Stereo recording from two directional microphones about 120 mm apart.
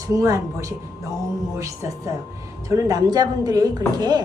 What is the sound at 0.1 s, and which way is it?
A woman's voice, 30° right (ahead or behind).